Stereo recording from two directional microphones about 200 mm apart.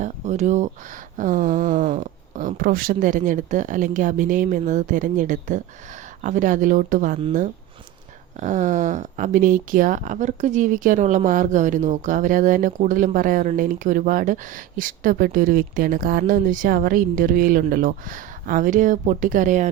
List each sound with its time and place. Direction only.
0.0 s speech: 35° right (ahead or behind)
8.4 s speech: 35° right (ahead or behind)